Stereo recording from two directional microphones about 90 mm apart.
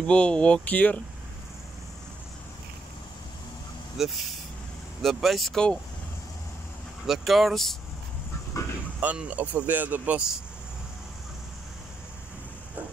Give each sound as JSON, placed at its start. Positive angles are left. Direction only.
{"t": 0.0, "sound": "speech", "side_deg": 10}
{"t": 4.0, "sound": "speech", "side_deg": 0}
{"t": 7.1, "sound": "speech", "side_deg": 0}
{"t": 9.0, "sound": "speech", "side_deg": -15}